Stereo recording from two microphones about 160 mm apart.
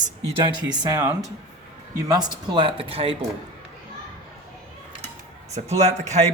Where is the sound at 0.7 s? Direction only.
25° right (ahead or behind).